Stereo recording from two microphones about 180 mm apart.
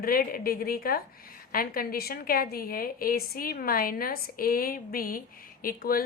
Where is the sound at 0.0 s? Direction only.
55° left (ahead or behind).